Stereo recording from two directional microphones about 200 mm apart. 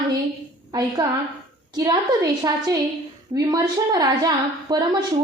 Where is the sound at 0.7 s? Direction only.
20° right (ahead or behind).